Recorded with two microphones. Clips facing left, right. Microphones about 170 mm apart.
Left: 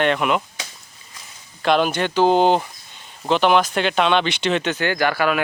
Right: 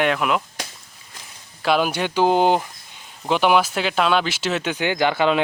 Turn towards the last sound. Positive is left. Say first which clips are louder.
# right 1 dB
turn(degrees=-20)  # may be behind; listen again after turning